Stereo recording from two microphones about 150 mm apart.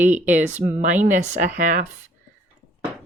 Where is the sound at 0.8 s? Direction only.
55° right (ahead or behind).